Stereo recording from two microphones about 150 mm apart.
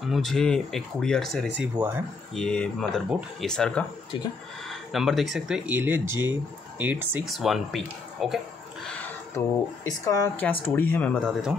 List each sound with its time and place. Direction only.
0.0 s speech: centre (ahead or behind)
1.8 s speech: 15° right (ahead or behind)
2.3 s speech: 5° left (ahead or behind)
3.1 s speech: 5° right (ahead or behind)
3.4 s speech: 5° left (ahead or behind); by 7.2 s 10° right (ahead or behind)
7.2 s speech: centre (ahead or behind)
8.8 s a sound: 10° left (ahead or behind)
9.8 s a woman's voice: 20° left (ahead or behind); by 11.5 s centre (ahead or behind)